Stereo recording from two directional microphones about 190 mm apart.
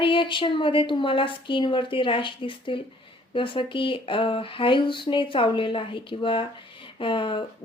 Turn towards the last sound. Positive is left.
turn(degrees=25)  # may be behind; listen again after turning